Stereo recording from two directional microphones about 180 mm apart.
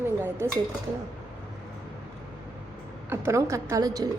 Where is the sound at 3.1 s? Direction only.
15° right (ahead or behind).